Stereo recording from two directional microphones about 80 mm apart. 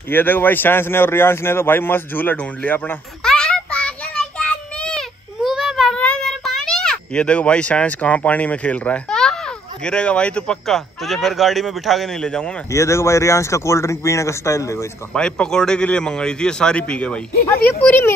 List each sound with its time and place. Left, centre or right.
0.1 s speech: left
3.3 s child singing: centre
5.4 s a sound: centre
5.9 s child singing: centre
6.2 s a child's voice: centre
11.1 s speech: centre
12.7 s speech: left
15.1 s a man's voice: centre
17.8 s speech: left